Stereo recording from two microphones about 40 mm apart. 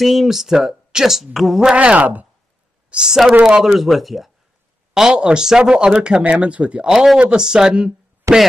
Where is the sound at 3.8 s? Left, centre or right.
Centre.